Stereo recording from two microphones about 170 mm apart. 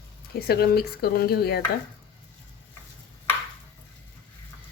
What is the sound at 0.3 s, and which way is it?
Speech, 65° left (ahead or behind).